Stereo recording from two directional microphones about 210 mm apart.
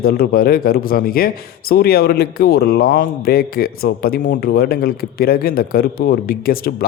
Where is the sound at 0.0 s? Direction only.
45° left (ahead or behind).